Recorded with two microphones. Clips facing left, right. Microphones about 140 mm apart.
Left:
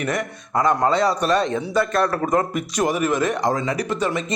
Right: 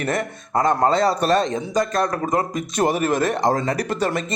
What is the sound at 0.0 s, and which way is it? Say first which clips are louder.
Speech: right 1 dB; 30° right (ahead or behind).